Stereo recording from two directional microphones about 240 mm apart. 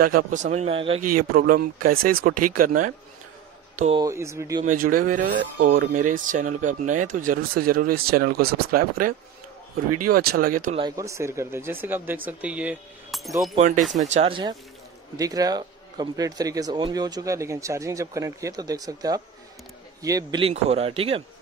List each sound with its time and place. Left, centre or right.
0.0 s a man's voice: right
1.3 s speech: right
4.0 s speech: centre
4.6 s speech: right
10.1 s speech: right
10.8 s speech: centre
13.6 s a man's voice: right